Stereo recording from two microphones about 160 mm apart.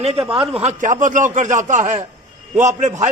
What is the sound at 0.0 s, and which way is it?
A man's voice, 35° right (ahead or behind).